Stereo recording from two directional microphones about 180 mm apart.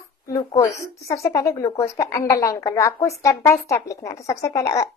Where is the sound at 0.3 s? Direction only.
20° left (ahead or behind).